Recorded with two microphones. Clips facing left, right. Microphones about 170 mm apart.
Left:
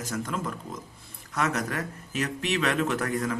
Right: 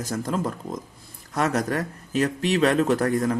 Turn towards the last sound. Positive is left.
turn(degrees=-35)  # may be behind; listen again after turning